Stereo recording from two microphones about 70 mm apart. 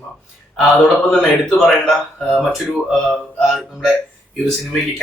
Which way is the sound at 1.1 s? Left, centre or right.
Centre.